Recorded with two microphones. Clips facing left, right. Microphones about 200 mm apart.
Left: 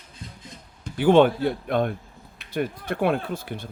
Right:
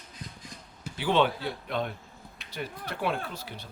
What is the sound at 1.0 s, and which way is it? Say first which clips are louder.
Speech: left 9 dB; 50° left (ahead or behind).